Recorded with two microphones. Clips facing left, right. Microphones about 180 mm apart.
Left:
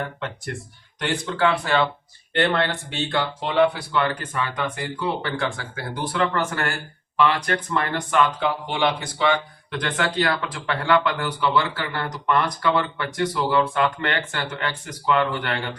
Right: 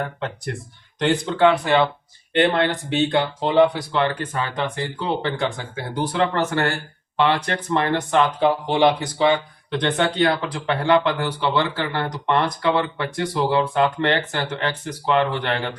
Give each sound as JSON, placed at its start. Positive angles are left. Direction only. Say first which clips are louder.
{"t": 0.9, "sound": "speech", "louder": "right 5 dB", "side_deg": -20}
{"t": 8.4, "sound": "speech", "louder": "right 6 dB", "side_deg": -35}